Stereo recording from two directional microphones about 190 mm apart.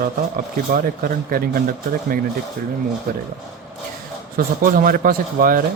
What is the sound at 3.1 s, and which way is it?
Speech, 50° right (ahead or behind).